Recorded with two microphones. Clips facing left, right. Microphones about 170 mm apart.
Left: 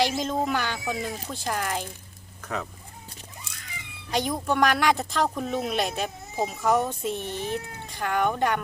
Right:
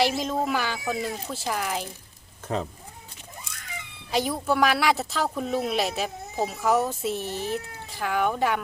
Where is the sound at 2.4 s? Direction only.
25° right (ahead or behind).